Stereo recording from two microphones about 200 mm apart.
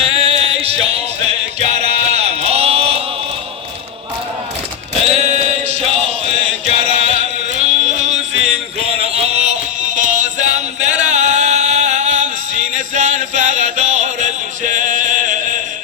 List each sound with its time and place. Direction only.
0.0 s a sound: 30° right (ahead or behind)
5.0 s chant: 35° right (ahead or behind)
7.6 s music: 35° right (ahead or behind)